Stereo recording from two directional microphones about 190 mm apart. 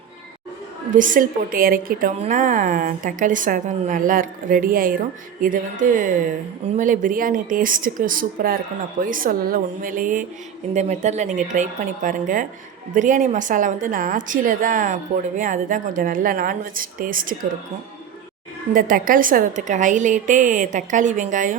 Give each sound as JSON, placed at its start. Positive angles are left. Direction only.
{"t": 0.9, "sound": "a woman's voice", "side_deg": -45}
{"t": 18.7, "sound": "a woman's voice", "side_deg": -45}